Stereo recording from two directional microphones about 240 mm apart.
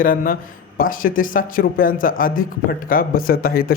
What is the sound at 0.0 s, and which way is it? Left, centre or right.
A man's voice, left.